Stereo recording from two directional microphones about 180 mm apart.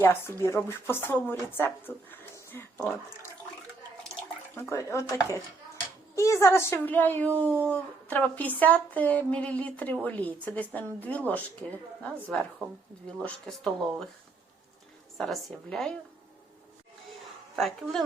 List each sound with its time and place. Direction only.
0.0 s speech: 15° left (ahead or behind)
4.7 s speech: 15° left (ahead or behind)
15.2 s speech: centre (ahead or behind)
17.6 s speech: centre (ahead or behind)